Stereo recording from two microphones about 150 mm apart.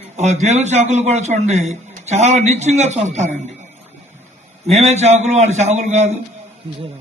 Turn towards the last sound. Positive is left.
turn(degrees=-50)  # may be behind; listen again after turning